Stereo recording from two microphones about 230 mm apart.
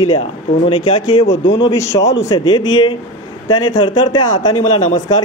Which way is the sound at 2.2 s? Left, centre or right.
Centre.